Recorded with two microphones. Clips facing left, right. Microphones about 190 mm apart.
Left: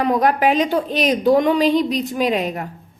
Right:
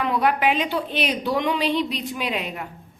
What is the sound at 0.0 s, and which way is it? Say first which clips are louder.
A woman's voice: left 5 dB; 40° left (ahead or behind).